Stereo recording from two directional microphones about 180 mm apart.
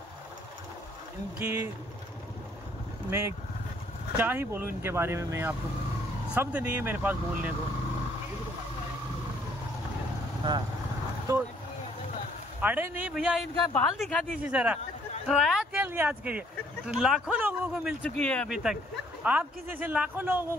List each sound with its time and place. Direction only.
1.4 s speech: 15° right (ahead or behind)
3.1 s speech: 15° right (ahead or behind)
11.3 s speech: 15° right (ahead or behind)
12.6 s a man's voice: 5° right (ahead or behind)
18.0 s a man's voice: 5° left (ahead or behind); by 20.4 s 10° right (ahead or behind)